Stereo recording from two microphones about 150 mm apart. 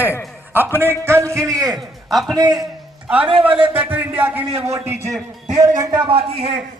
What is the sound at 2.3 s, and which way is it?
Speech, 25° right (ahead or behind).